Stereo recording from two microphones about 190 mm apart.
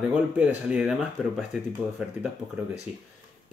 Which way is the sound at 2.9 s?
30° left (ahead or behind).